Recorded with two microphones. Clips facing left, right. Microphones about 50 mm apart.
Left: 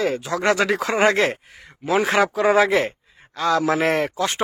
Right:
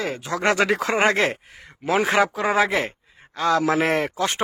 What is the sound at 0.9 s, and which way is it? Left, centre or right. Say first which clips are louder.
Speech: left 4 dB; centre.